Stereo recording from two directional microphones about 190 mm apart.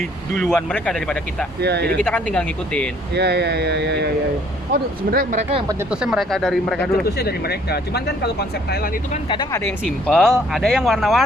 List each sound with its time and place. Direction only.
0.4 s speech: 5° left (ahead or behind)
1.6 s speech: 60° right (ahead or behind)
2.0 s speech: 5° left (ahead or behind)
3.2 s speech: 60° right (ahead or behind)
4.7 s speech: 45° right (ahead or behind)
5.9 s speech: 5° right (ahead or behind)
7.0 s speech: 55° left (ahead or behind)
9.3 s speech: 25° left (ahead or behind)
9.6 s speech: 5° left (ahead or behind)